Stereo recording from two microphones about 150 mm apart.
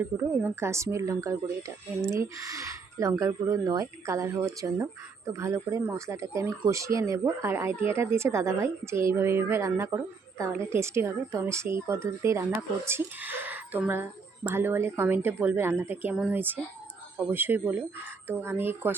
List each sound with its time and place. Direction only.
0.0 s a woman's voice: 15° right (ahead or behind)